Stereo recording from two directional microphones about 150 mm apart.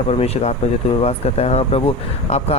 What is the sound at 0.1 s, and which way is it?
Speech, 45° left (ahead or behind).